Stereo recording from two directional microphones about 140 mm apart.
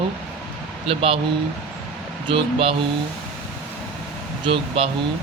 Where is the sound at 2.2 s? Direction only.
40° right (ahead or behind).